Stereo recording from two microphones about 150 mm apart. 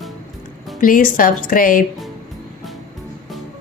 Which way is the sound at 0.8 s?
65° left (ahead or behind).